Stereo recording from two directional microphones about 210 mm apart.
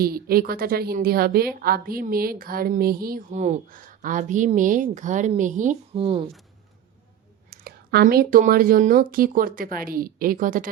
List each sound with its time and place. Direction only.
0.0 s a woman's voice: 45° right (ahead or behind); by 6.2 s 25° right (ahead or behind)
7.5 s a woman's voice: 50° right (ahead or behind)